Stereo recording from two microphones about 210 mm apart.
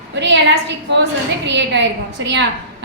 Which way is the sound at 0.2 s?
55° right (ahead or behind).